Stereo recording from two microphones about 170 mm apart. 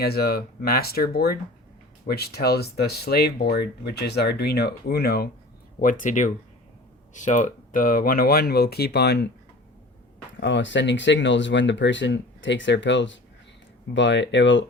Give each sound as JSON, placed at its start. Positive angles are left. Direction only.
{"t": 0.0, "sound": "speech", "side_deg": 65}
{"t": 5.8, "sound": "speech", "side_deg": 50}
{"t": 10.4, "sound": "speech", "side_deg": 90}